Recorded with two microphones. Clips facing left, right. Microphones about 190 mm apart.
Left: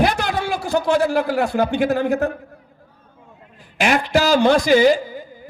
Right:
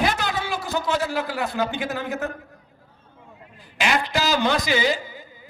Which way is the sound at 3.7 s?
50° left (ahead or behind).